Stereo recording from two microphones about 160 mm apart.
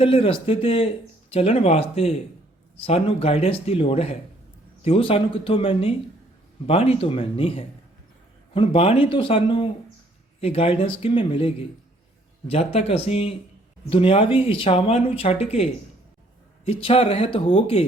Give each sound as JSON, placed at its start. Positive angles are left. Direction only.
{"t": 0.0, "sound": "speech", "side_deg": 35}